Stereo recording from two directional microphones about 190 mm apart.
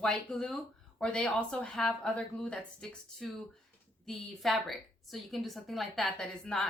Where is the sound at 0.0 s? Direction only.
5° left (ahead or behind).